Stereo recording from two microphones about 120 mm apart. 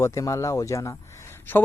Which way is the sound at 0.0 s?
25° left (ahead or behind).